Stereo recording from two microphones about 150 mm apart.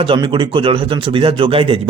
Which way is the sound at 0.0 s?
35° right (ahead or behind).